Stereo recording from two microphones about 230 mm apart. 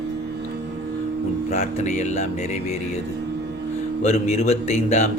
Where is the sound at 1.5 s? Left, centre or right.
Left.